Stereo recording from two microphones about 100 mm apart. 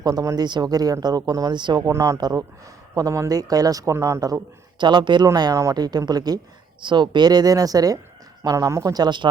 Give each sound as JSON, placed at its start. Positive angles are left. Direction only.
{"t": 0.0, "sound": "speech", "side_deg": -40}
{"t": 1.9, "sound": "speech", "side_deg": -35}